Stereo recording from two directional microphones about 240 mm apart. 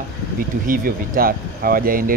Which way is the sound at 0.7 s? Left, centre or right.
Right.